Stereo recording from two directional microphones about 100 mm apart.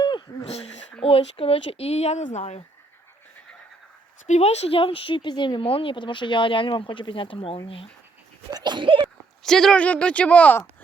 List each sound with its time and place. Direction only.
0.4 s speech: 90° left
1.0 s speech: 70° left (ahead or behind); by 2.6 s 90° left
4.4 s speech: 90° left; by 7.6 s 65° left (ahead or behind)
8.4 s speech: 45° right (ahead or behind)
9.4 s speech: 5° left (ahead or behind)